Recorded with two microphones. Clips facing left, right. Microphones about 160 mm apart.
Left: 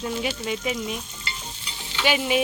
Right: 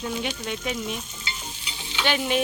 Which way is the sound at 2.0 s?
5° left (ahead or behind).